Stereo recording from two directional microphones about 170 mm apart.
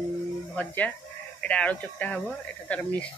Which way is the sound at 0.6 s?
10° left (ahead or behind).